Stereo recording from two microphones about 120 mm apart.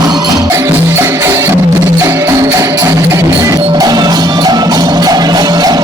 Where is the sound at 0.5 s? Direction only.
20° right (ahead or behind).